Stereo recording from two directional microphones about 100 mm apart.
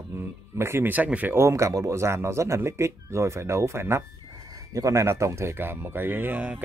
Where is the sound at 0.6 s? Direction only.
25° right (ahead or behind).